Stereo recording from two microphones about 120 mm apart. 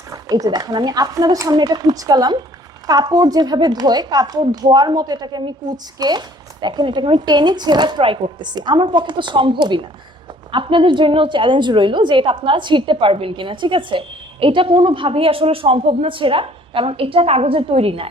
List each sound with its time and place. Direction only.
0.1 s a woman's voice: 30° right (ahead or behind); by 18.1 s 50° right (ahead or behind)